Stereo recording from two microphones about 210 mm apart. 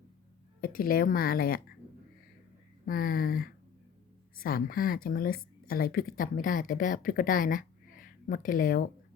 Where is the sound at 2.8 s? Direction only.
40° left (ahead or behind).